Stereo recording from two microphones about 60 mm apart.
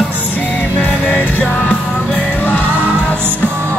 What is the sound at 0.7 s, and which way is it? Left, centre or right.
Music, left.